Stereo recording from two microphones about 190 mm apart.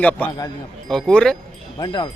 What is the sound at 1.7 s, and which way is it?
Speech, 25° left (ahead or behind).